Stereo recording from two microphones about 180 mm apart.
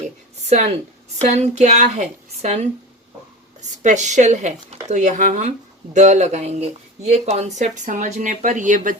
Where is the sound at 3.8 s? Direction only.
40° right (ahead or behind).